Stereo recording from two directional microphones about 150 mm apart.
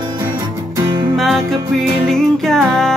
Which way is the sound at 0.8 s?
30° right (ahead or behind).